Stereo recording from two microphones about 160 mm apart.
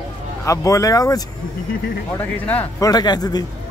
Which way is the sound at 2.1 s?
10° left (ahead or behind).